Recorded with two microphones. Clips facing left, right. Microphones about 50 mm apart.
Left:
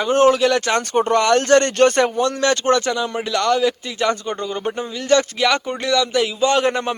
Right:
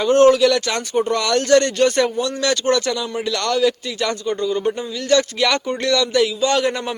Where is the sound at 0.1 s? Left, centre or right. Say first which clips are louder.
Right 2 dB; left.